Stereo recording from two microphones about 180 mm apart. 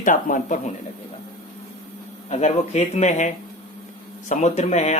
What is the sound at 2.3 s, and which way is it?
Speech, 40° left (ahead or behind).